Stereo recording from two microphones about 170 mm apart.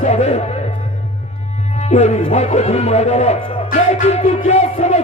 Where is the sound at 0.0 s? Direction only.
40° left (ahead or behind).